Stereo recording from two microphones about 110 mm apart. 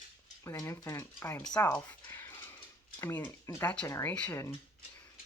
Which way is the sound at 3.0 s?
20° left (ahead or behind).